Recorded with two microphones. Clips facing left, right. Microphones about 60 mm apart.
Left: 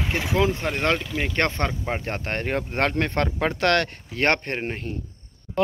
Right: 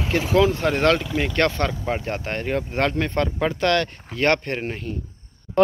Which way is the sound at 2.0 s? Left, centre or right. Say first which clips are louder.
Right 1 dB; left.